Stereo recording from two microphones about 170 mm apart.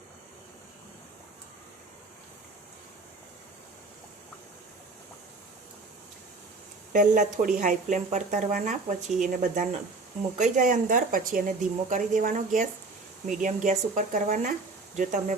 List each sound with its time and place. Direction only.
6.9 s speech: 50° right (ahead or behind)